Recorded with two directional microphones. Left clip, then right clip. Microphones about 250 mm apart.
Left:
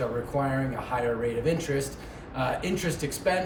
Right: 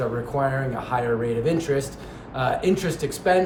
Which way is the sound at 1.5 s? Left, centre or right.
Centre.